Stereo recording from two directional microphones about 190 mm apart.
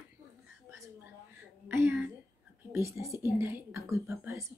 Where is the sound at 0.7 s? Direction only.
15° right (ahead or behind).